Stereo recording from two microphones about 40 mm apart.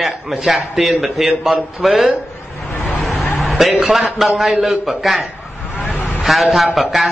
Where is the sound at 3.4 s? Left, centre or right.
Centre.